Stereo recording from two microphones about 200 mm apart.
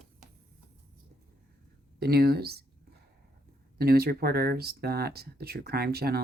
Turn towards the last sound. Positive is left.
turn(degrees=-50)  # may be behind; listen again after turning